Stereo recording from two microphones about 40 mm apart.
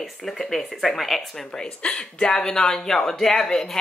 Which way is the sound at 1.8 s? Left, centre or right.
Left.